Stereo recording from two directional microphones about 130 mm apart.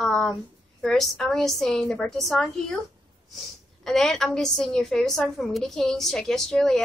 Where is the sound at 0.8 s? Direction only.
5° left (ahead or behind).